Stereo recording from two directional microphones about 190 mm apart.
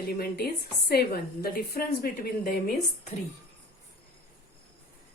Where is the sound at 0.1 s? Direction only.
55° left (ahead or behind).